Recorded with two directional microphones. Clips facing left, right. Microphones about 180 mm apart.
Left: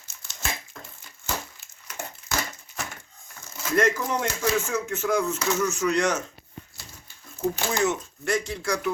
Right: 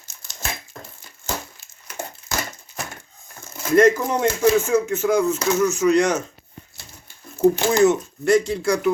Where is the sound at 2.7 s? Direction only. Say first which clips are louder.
Right 3 dB; 35° right (ahead or behind).